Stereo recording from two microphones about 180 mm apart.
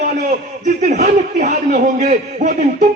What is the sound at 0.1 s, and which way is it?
A man's voice, 45° right (ahead or behind).